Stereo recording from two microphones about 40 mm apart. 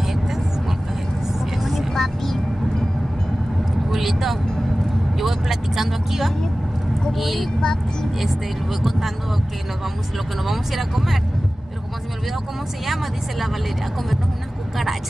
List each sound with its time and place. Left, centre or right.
0.0 s vehicle: centre
1.6 s vehicle: centre
3.9 s vehicle: centre
7.1 s speech: centre
7.6 s speech: centre
10.4 s speech: centre
12.8 s speech: centre